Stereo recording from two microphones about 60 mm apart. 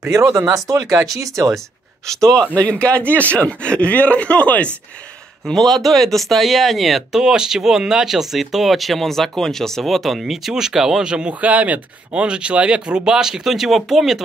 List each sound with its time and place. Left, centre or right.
0.1 s speech: right
2.0 s speech: centre
2.5 s speech: left
5.5 s speech: centre